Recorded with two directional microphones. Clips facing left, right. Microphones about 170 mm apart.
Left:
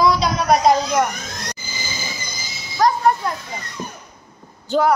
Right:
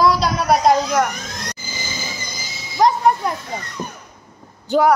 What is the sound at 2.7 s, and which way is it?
Wind chime, 20° right (ahead or behind).